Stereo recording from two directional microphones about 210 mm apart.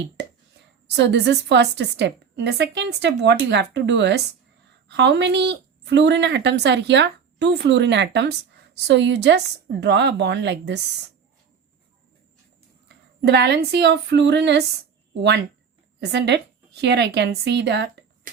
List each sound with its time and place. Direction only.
0.9 s a woman's voice: 55° right (ahead or behind)
13.2 s speech: 55° right (ahead or behind)
16.0 s a woman's voice: 55° right (ahead or behind)